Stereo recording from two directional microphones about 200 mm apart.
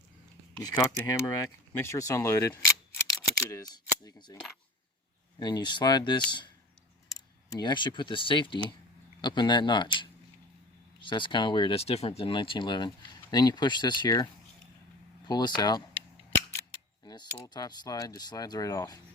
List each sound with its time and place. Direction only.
0.6 s speech: 20° left (ahead or behind)
5.4 s speech: 20° left (ahead or behind)
15.3 s speech: 20° left (ahead or behind)
17.0 s speech: 20° left (ahead or behind)